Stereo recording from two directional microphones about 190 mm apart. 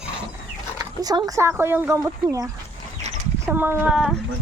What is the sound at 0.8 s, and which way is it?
Speech, 20° right (ahead or behind).